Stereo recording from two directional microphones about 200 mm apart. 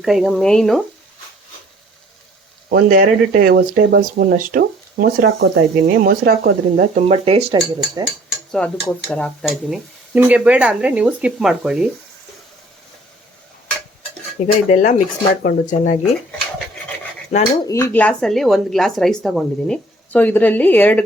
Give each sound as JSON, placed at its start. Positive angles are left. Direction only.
{"t": 0.0, "sound": "speech", "side_deg": 0}
{"t": 2.6, "sound": "speech", "side_deg": -45}
{"t": 7.3, "sound": "speech", "side_deg": -30}
{"t": 8.5, "sound": "speech", "side_deg": 5}
{"t": 14.4, "sound": "speech", "side_deg": 40}
{"t": 17.3, "sound": "speech", "side_deg": 35}
{"t": 17.7, "sound": "speech", "side_deg": 15}